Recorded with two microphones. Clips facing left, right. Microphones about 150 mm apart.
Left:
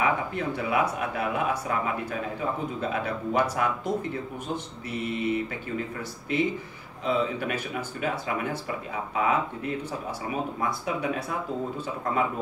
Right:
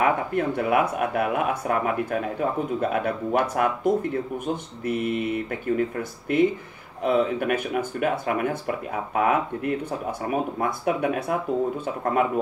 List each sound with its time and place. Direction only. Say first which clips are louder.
0.0 s speech: right 4 dB; 55° right (ahead or behind)